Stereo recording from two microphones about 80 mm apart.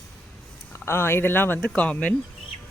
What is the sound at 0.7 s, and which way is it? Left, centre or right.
Speech, left.